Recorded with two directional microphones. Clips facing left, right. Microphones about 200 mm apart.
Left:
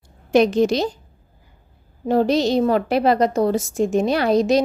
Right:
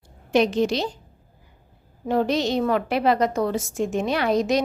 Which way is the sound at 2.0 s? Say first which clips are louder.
Left 4 dB; 35° left (ahead or behind).